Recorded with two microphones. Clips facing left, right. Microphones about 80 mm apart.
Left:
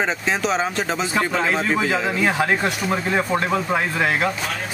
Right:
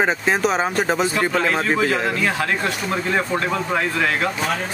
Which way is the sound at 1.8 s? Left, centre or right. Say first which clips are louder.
Right 1 dB; centre.